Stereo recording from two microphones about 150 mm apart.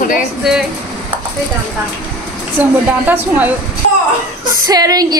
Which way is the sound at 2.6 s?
10° right (ahead or behind).